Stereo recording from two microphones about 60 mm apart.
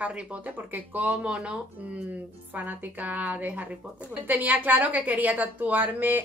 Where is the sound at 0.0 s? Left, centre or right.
Right.